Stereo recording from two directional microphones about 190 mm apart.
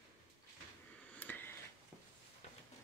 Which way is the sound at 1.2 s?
10° left (ahead or behind).